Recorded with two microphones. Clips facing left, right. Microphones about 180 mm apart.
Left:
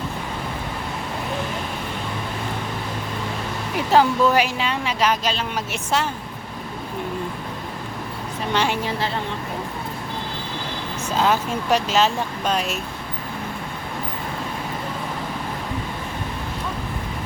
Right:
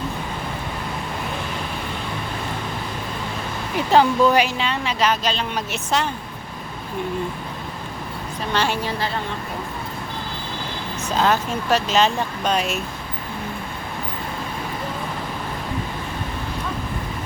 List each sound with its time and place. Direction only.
3.9 s speech: 5° left (ahead or behind)
8.5 s a woman's voice: 20° left (ahead or behind)
11.2 s speech: 10° left (ahead or behind)